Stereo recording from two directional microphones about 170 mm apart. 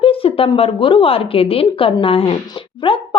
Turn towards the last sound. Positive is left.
turn(degrees=30)  # may be behind; listen again after turning